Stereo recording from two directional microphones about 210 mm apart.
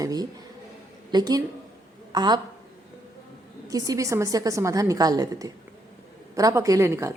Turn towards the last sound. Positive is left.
turn(degrees=-15)  # may be behind; listen again after turning